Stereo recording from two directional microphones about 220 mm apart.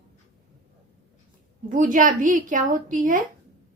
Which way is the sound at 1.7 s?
35° right (ahead or behind).